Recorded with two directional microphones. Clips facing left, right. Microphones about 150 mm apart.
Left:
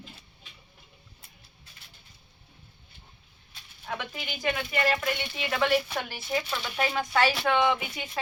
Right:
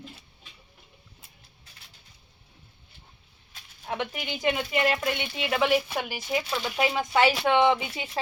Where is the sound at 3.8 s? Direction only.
20° right (ahead or behind).